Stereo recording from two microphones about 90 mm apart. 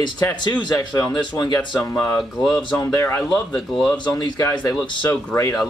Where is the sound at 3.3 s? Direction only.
5° left (ahead or behind).